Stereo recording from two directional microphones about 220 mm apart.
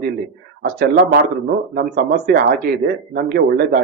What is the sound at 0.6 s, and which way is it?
A man's voice, 45° right (ahead or behind).